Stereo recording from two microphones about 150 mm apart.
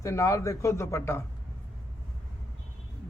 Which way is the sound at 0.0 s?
20° left (ahead or behind).